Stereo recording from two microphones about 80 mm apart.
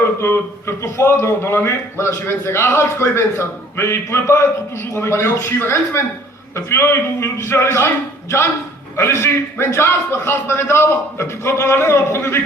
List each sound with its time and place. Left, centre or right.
0.0 s a man's voice: left
9.0 s a man's voice: left